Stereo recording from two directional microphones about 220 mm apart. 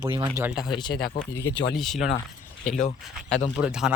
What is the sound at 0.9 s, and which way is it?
Speech, 45° left (ahead or behind).